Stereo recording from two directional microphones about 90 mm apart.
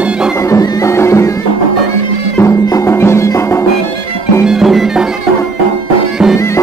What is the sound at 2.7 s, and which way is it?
Music, 30° left (ahead or behind).